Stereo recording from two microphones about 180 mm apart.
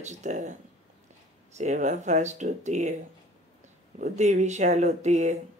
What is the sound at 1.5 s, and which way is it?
Speech, 40° right (ahead or behind).